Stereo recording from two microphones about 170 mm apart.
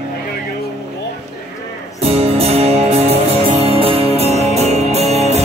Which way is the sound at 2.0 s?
35° right (ahead or behind).